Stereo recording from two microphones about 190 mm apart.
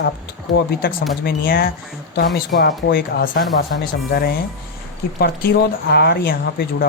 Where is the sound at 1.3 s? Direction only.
50° left (ahead or behind).